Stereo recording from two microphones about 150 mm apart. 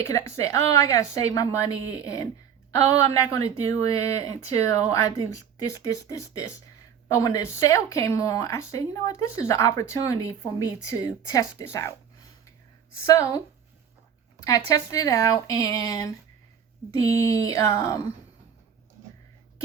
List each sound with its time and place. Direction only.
0.0 s speech: 20° left (ahead or behind)
2.9 s speech: 20° left (ahead or behind)
13.1 s speech: 20° left (ahead or behind)
14.4 s speech: 20° left (ahead or behind)
17.1 s speech: 20° left (ahead or behind)